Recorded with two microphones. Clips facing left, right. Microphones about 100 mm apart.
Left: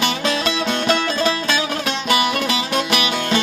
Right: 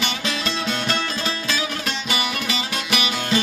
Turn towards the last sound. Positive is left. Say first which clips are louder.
# left 3 dB
turn(degrees=50)  # may be behind; listen again after turning